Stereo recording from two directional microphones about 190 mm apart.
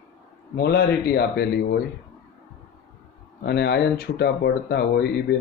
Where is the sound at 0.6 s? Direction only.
55° left (ahead or behind).